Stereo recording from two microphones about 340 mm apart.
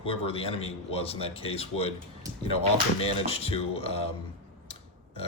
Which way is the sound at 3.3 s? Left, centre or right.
Centre.